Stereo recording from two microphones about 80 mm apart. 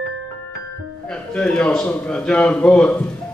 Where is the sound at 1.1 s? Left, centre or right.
Centre.